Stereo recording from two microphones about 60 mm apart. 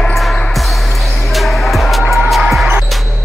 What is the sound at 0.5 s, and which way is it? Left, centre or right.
Music, centre.